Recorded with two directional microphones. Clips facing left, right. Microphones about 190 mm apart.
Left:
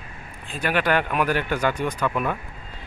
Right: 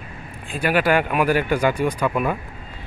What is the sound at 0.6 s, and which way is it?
Speech, 10° right (ahead or behind).